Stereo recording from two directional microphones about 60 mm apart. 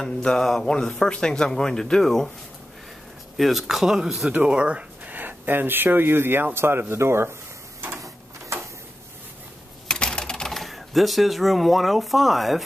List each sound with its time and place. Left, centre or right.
0.0 s speech: centre
3.3 s speech: centre
4.3 s speech: centre
5.1 s speech: right
8.0 s a sound: right
9.8 s speech: centre